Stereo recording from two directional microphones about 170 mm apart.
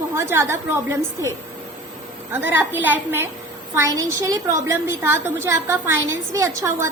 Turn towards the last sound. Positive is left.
turn(degrees=-15)  # may be behind; listen again after turning